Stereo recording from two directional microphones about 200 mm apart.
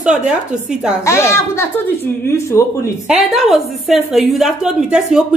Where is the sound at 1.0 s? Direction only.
15° left (ahead or behind).